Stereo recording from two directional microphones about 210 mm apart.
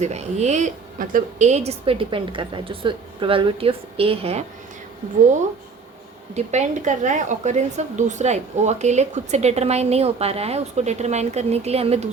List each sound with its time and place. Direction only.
0.0 s a woman's voice: 30° right (ahead or behind)
6.3 s a woman's voice: 35° right (ahead or behind)